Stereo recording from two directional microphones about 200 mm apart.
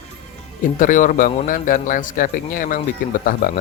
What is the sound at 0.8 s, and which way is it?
A man's voice, 40° left (ahead or behind).